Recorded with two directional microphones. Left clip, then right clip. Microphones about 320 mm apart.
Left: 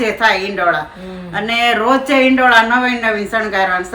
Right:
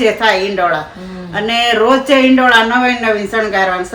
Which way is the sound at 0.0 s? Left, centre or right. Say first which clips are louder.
Right 2 dB; centre.